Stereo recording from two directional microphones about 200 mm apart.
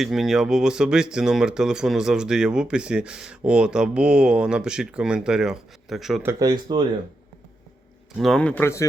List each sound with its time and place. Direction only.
0.0 s speech: centre (ahead or behind)
6.2 s speech: 20° right (ahead or behind)
8.2 s speech: 5° left (ahead or behind)